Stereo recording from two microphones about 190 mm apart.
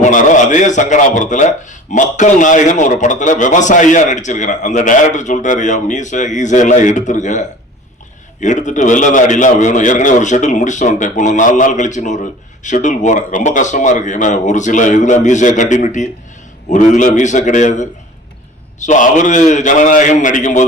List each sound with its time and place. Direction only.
0.0 s speech: 40° left (ahead or behind)